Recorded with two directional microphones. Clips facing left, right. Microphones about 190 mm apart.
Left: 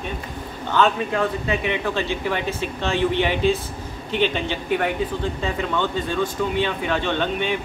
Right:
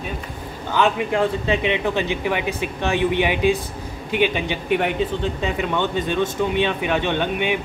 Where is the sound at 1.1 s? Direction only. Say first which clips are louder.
Right 3 dB; 20° right (ahead or behind).